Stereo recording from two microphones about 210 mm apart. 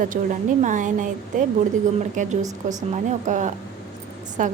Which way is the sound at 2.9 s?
35° right (ahead or behind).